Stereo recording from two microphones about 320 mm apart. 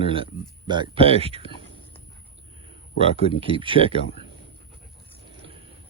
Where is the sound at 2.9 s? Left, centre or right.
Centre.